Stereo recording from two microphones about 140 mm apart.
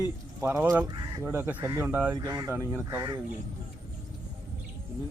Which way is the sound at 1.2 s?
15° right (ahead or behind).